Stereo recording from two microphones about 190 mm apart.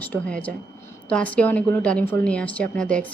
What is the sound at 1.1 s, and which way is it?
Speech, 5° left (ahead or behind).